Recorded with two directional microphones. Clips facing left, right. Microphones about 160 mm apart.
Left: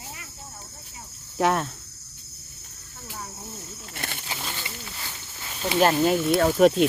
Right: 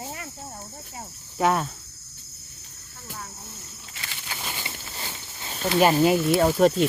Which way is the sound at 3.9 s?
55° left (ahead or behind).